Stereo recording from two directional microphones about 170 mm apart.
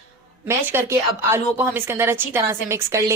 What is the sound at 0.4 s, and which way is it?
A woman's voice, 15° right (ahead or behind).